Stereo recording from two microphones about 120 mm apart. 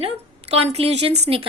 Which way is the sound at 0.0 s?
60° right (ahead or behind).